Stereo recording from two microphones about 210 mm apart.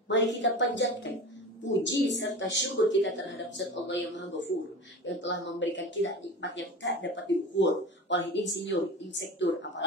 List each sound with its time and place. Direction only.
0.1 s speech: 60° left (ahead or behind)